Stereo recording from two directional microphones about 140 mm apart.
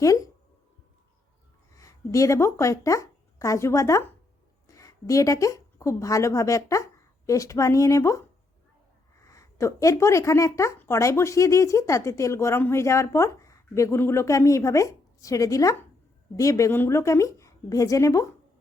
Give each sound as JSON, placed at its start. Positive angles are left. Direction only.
{"t": 0.0, "sound": "speech", "side_deg": 25}
{"t": 1.7, "sound": "speech", "side_deg": 25}
{"t": 9.2, "sound": "speech", "side_deg": 25}